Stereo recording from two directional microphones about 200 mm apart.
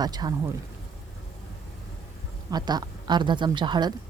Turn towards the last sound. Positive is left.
turn(degrees=-20)  # may be behind; listen again after turning